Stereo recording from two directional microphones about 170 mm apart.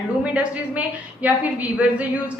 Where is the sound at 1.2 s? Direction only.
10° right (ahead or behind).